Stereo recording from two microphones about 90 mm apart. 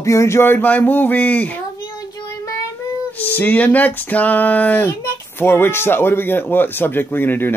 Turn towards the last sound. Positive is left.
turn(degrees=25)  # may be behind; listen again after turning